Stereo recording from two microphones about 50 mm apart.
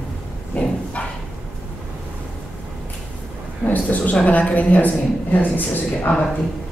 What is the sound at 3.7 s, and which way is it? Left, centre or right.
Speech, left.